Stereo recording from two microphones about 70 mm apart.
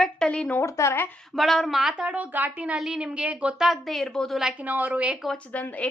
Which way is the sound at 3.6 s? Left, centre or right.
Centre.